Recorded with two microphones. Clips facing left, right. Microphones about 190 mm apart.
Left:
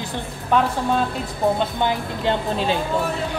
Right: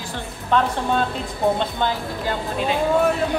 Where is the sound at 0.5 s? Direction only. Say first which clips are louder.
Left 1 dB; 10° left (ahead or behind).